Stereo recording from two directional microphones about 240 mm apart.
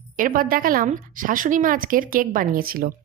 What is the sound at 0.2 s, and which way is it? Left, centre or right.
Speech, right.